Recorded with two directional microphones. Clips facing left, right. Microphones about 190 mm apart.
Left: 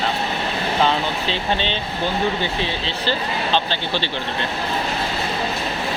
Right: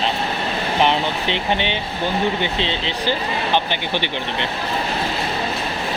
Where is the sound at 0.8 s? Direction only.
20° right (ahead or behind).